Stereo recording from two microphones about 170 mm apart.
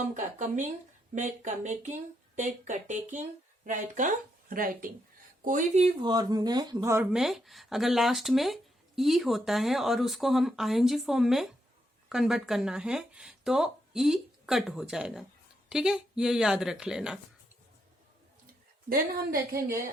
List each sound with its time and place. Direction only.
0.2 s speech: 45° right (ahead or behind)
5.5 s speech: 45° right (ahead or behind); by 7.1 s 15° right (ahead or behind)
7.1 s speech: centre (ahead or behind)
18.9 s a woman's voice: 60° right (ahead or behind)